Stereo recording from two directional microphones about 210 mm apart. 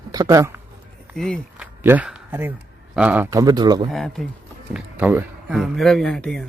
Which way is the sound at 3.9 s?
Centre (ahead or behind).